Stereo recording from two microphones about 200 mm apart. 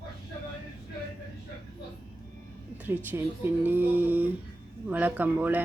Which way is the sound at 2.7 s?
10° right (ahead or behind).